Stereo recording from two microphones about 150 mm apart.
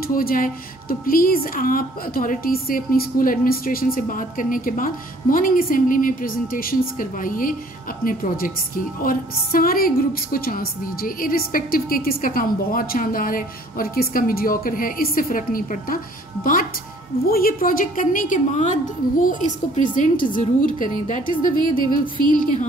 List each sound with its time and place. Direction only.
0.1 s a woman's voice: 75° left (ahead or behind)
17.3 s a woman's voice: 75° left (ahead or behind)